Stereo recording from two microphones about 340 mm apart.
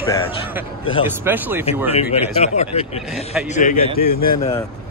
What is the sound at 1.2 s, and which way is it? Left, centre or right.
Speech, centre.